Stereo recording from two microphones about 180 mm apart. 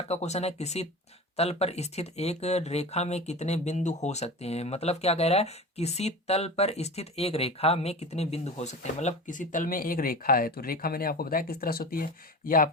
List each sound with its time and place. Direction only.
0.1 s speech: 35° left (ahead or behind)